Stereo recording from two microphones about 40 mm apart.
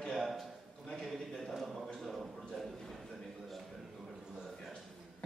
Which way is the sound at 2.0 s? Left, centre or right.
Centre.